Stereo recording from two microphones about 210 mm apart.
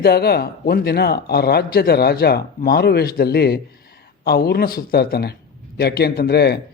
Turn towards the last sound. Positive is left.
turn(degrees=50)  # may be behind; listen again after turning